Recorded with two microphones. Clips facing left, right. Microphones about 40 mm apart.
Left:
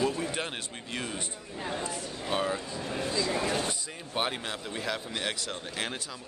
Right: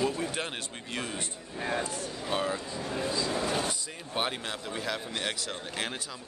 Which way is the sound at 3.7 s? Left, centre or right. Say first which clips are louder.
Even; centre.